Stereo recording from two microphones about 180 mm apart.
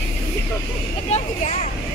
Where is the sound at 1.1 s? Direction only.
40° left (ahead or behind).